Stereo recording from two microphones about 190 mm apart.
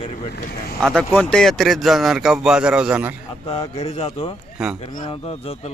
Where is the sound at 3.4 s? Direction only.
30° left (ahead or behind).